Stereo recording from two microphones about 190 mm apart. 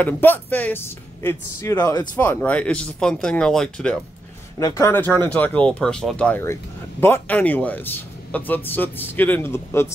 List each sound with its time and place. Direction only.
0.0 s speech: 10° left (ahead or behind)
4.6 s speech: 15° left (ahead or behind)